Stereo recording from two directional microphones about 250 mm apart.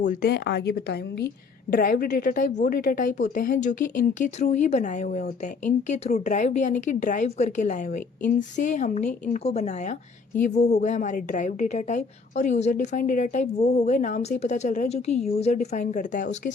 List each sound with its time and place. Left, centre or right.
0.0 s a woman's voice: left